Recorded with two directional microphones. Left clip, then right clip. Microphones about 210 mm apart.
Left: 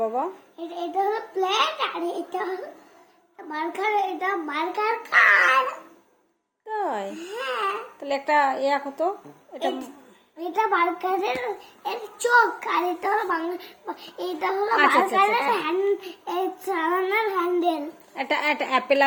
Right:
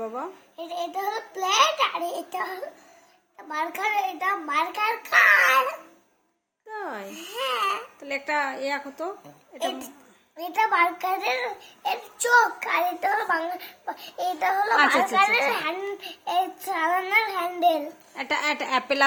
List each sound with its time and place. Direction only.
0.5 s a child's voice: 55° right (ahead or behind)
3.5 s a child's voice: 55° right (ahead or behind)
6.7 s a woman's voice: centre (ahead or behind)
7.1 s a child's voice: 50° right (ahead or behind)
8.0 s a woman's voice: 5° right (ahead or behind)
10.3 s a child's voice: 55° right (ahead or behind)
18.1 s a woman's voice: 10° right (ahead or behind)